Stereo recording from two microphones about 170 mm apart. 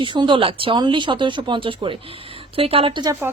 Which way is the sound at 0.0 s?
30° right (ahead or behind).